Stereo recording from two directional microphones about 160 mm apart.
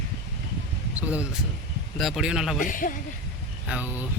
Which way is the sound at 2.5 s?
55° left (ahead or behind).